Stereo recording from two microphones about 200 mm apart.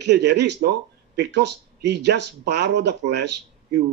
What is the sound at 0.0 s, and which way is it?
A man's voice, 55° right (ahead or behind).